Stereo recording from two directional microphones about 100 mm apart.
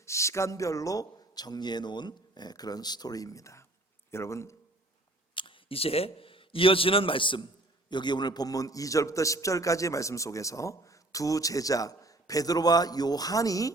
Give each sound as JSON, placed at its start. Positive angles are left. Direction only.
{"t": 0.0, "sound": "speech", "side_deg": 30}
{"t": 5.3, "sound": "a man's voice", "side_deg": 55}